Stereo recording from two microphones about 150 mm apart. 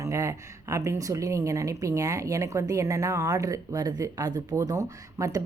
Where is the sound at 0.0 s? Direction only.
20° right (ahead or behind).